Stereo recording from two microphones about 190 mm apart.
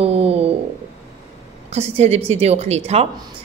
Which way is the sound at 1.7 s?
35° right (ahead or behind).